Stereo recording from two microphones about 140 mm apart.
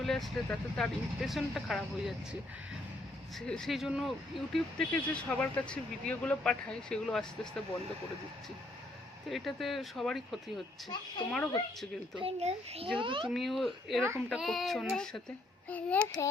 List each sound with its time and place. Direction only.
0.0 s speech: centre (ahead or behind)
3.4 s speech: 5° left (ahead or behind)
9.3 s speech: centre (ahead or behind)
12.2 s a child's voice: 50° right (ahead or behind)
13.3 s speech: centre (ahead or behind)